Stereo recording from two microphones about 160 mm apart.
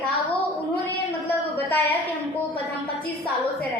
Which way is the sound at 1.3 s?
15° left (ahead or behind).